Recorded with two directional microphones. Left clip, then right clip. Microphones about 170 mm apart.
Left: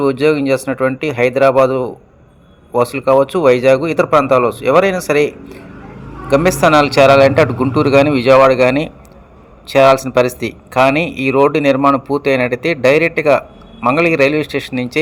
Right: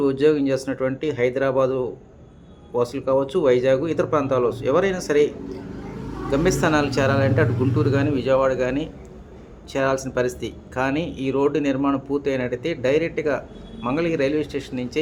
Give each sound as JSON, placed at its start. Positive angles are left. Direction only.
{"t": 0.0, "sound": "a man's voice", "side_deg": 25}